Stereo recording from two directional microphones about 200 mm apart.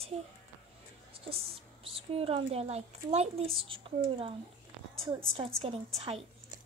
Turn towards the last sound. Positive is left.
turn(degrees=-30)  # may be behind; listen again after turning